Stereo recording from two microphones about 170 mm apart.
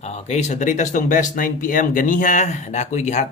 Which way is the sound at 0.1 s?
40° left (ahead or behind).